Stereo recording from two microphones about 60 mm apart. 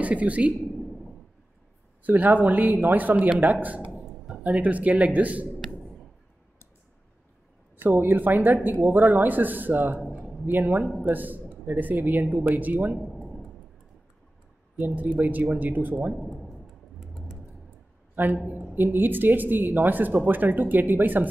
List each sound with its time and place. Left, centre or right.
0.0 s speech: right
2.0 s speech: right
4.1 s a sound: centre
4.4 s speech: right
8.0 s speech: right
15.0 s speech: right
17.0 s typing: centre
18.1 s a man's voice: right